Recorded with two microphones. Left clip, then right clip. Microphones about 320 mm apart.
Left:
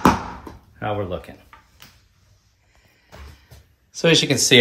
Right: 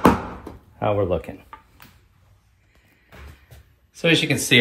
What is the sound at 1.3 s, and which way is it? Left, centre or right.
Speech, right.